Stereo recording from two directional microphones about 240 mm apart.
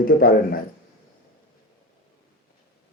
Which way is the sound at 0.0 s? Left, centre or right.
Left.